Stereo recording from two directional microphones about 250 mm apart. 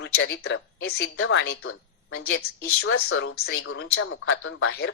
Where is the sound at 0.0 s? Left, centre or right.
Left.